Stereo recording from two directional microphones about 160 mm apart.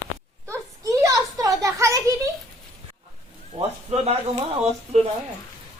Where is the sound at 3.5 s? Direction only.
40° right (ahead or behind).